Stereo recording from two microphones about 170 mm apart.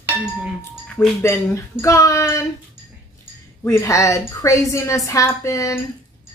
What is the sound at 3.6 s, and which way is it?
A woman's voice, 15° left (ahead or behind).